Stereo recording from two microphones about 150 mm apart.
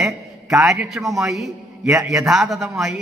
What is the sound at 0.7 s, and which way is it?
A man's voice, 5° right (ahead or behind).